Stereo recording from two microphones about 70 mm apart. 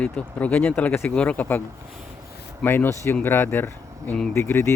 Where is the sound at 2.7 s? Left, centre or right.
Left.